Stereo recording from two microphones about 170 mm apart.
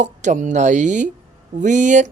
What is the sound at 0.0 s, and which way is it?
Speech, 45° right (ahead or behind).